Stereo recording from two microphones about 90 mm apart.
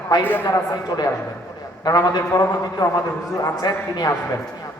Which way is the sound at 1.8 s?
50° left (ahead or behind).